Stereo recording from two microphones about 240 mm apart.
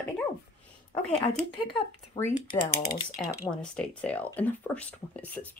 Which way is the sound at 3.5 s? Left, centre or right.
Centre.